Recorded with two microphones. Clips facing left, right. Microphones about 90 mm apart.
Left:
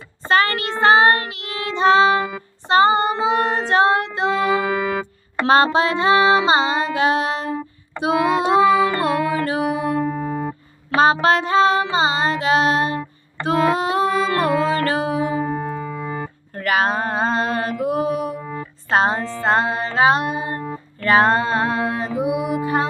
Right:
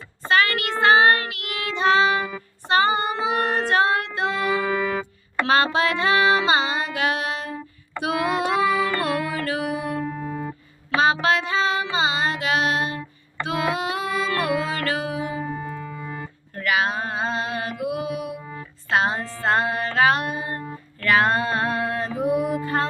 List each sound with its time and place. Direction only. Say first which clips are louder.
0.3 s child singing: left 2 dB; 35° left (ahead or behind)
2.6 s music: left 5 dB; 25° left (ahead or behind)
4.8 s music: left 2 dB; 10° left (ahead or behind)
5.5 s music: left 5 dB; 30° left (ahead or behind)
10.1 s music: left 6 dB; 75° left (ahead or behind)
10.9 s music: left 4 dB; 35° left (ahead or behind)
15.4 s keyboard: left 6 dB; 70° left (ahead or behind); by 16.2 s 85° left
16.6 s mantra: left 4 dB; 40° left (ahead or behind)
18.9 s a woman's voice: left 4 dB; 35° left (ahead or behind)
19.4 s music: left 2 dB; 25° left (ahead or behind)